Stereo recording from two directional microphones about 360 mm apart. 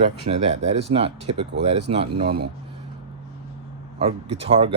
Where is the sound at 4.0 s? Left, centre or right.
Centre.